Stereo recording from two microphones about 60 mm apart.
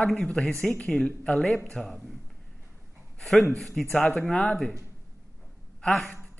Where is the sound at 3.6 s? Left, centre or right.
Centre.